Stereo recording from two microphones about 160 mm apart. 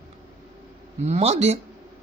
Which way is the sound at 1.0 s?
45° right (ahead or behind).